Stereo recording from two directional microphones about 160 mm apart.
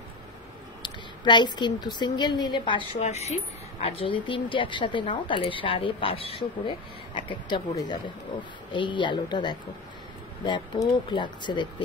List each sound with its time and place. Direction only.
0.8 s a woman's voice: 30° left (ahead or behind)
3.0 s a woman's voice: 45° left (ahead or behind)